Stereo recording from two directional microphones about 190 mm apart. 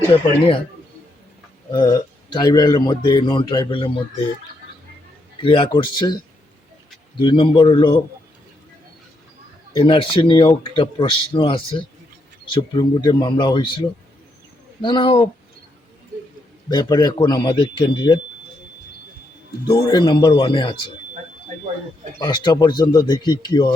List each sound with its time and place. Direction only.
0.1 s speech: 30° left (ahead or behind)
1.7 s speech: 25° left (ahead or behind)
5.4 s speech: 25° left (ahead or behind)
7.2 s speech: 25° left (ahead or behind)
9.8 s speech: 25° left (ahead or behind)
16.6 s speech: 20° left (ahead or behind)
19.6 s speech: 25° left (ahead or behind)
22.2 s speech: 25° left (ahead or behind)